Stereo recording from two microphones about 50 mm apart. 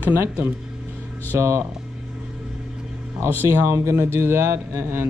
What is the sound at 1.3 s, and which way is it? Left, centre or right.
Speech, right.